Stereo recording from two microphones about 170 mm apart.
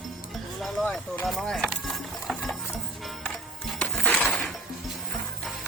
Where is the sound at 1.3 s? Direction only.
Centre (ahead or behind).